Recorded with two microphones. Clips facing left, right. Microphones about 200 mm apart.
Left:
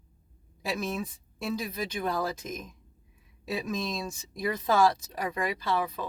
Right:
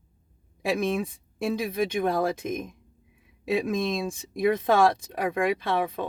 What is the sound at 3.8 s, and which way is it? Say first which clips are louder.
Speech: right 6 dB; 55° right (ahead or behind).